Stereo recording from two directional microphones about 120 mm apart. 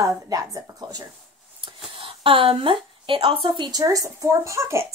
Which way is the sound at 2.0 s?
45° right (ahead or behind).